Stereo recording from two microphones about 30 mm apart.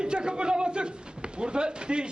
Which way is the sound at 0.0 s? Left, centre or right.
Right.